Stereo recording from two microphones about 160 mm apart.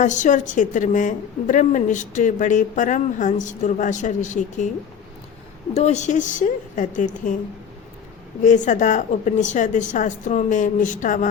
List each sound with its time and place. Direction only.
0.0 s a woman's voice: 50° left (ahead or behind)
5.7 s a woman's voice: 45° left (ahead or behind)
8.4 s a woman's voice: 50° left (ahead or behind)